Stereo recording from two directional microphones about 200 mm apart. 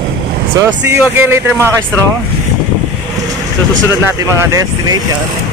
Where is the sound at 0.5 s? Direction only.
15° right (ahead or behind).